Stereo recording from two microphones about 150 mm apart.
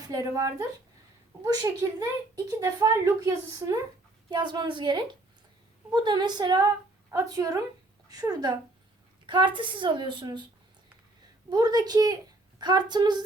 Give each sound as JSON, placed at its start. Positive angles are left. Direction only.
{"t": 0.1, "sound": "speech", "side_deg": -20}
{"t": 4.3, "sound": "a woman's voice", "side_deg": -30}
{"t": 11.4, "sound": "a woman's voice", "side_deg": -25}